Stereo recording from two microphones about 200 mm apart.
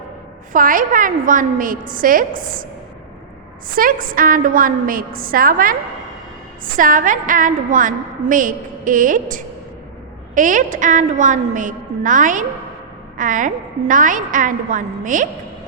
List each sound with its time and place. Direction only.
0.5 s a woman's voice: 45° right (ahead or behind)
3.8 s a woman's voice: 45° right (ahead or behind)
6.7 s a woman's voice: 40° right (ahead or behind)